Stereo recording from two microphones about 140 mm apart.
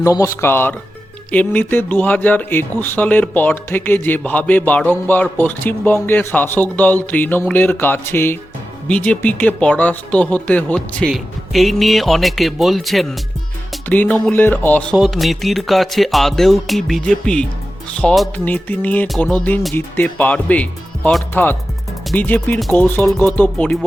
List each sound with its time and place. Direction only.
0.0 s speech: 20° left (ahead or behind); by 13.1 s centre (ahead or behind)
13.8 s speech: 10° left (ahead or behind)
14.9 s speech: centre (ahead or behind)
18.4 s speech: 10° left (ahead or behind)